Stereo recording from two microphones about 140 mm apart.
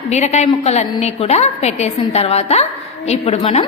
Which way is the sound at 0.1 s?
55° left (ahead or behind).